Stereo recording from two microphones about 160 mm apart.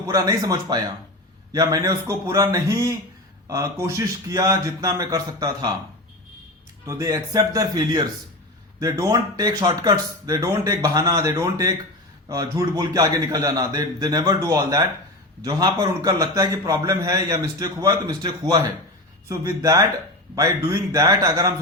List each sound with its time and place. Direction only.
0.1 s a man's voice: 20° right (ahead or behind)
6.8 s a man's voice: 20° right (ahead or behind)